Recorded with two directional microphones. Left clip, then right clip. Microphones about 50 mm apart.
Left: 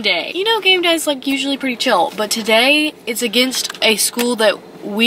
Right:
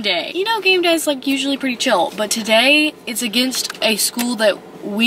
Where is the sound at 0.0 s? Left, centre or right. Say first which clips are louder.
Left 2 dB; centre.